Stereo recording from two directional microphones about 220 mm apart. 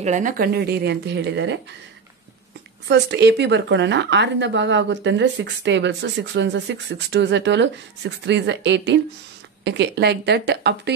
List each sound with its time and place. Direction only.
0.0 s speech: 35° right (ahead or behind); by 1.6 s 55° right (ahead or behind)
2.9 s speech: 50° right (ahead or behind)